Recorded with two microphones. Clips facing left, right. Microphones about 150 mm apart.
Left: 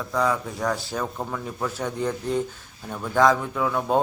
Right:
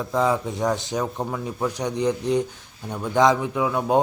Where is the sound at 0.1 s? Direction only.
20° right (ahead or behind).